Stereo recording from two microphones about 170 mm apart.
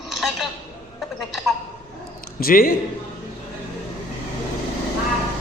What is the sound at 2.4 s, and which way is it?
Speech, 60° left (ahead or behind).